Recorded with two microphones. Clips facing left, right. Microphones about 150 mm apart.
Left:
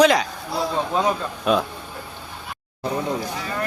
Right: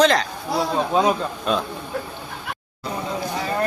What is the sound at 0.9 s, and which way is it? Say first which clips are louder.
Speech: right 3 dB; 15° right (ahead or behind).